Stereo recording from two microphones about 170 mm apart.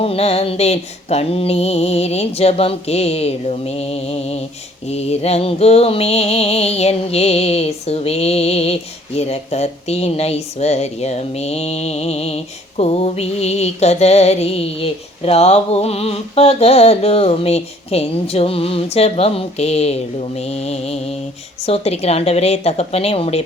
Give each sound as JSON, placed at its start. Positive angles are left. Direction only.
{"t": 0.0, "sound": "music", "side_deg": 35}